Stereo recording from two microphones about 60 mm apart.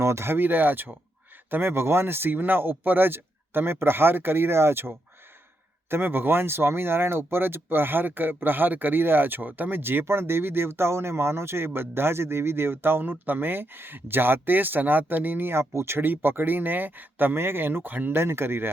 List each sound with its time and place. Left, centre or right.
0.0 s speech: right
0.3 s speech: right
15.7 s speech: right